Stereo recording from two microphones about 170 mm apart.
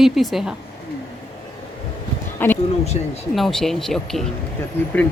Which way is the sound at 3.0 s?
35° left (ahead or behind).